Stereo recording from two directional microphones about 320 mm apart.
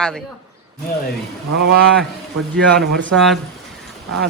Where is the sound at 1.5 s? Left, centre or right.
Right.